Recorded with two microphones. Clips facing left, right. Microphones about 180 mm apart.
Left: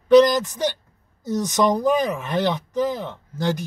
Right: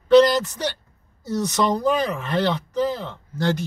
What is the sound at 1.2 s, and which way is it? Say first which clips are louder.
Speech: left 2 dB; 15° left (ahead or behind).